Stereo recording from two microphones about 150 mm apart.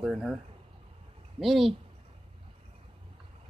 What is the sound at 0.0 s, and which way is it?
Speech, 5° right (ahead or behind).